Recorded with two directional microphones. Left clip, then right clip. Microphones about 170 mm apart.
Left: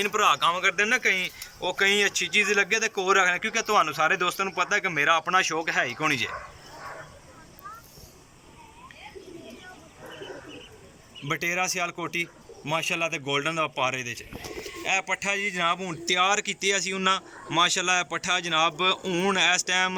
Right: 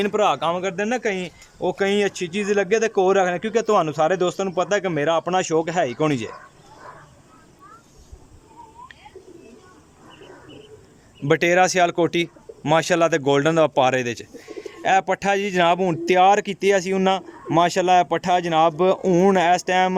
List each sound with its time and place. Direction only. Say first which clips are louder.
0.0 s speech: right 2 dB; 55° right (ahead or behind)
11.3 s speech: right 10 dB; 75° right (ahead or behind); by 20.0 s 45° right (ahead or behind)